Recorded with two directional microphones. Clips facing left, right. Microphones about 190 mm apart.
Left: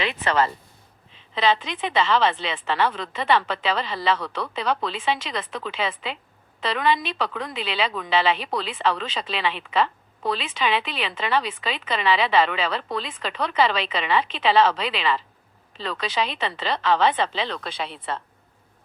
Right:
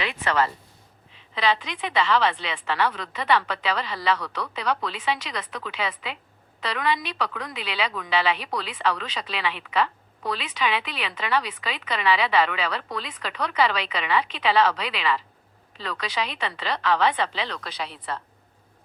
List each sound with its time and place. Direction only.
0.0 s a woman's voice: 25° left (ahead or behind)